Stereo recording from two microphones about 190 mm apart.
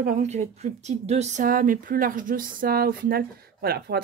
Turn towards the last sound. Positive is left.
turn(degrees=-55)  # may be behind; listen again after turning